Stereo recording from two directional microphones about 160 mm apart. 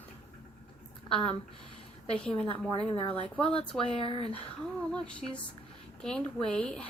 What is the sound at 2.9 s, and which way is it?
Speech, 35° left (ahead or behind).